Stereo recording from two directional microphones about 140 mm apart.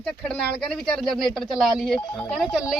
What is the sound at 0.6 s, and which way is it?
Speech, 5° left (ahead or behind).